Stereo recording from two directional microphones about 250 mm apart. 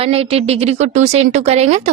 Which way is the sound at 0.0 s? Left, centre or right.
Right.